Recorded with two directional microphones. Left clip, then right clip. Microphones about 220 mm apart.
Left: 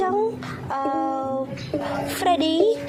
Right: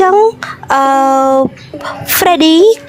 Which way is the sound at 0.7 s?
50° right (ahead or behind).